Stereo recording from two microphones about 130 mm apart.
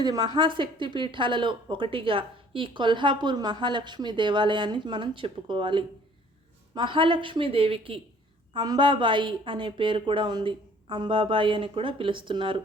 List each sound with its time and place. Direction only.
0.0 s speech: 30° right (ahead or behind)
8.5 s speech: 35° right (ahead or behind)